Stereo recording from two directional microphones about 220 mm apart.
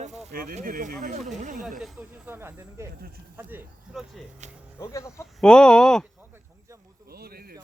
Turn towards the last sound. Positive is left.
turn(degrees=-45)  # may be behind; listen again after turning